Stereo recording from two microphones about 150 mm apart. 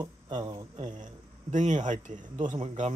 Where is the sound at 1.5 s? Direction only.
55° right (ahead or behind).